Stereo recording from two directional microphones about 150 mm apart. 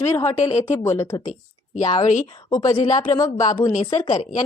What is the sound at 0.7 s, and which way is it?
Speech, 15° left (ahead or behind).